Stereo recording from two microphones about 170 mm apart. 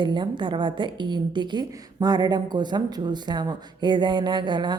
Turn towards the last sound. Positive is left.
turn(degrees=-25)  # may be behind; listen again after turning